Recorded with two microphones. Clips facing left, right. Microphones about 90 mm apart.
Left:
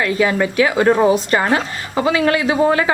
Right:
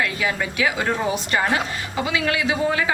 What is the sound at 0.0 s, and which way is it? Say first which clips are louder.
A woman's voice: left 7 dB; 45° left (ahead or behind).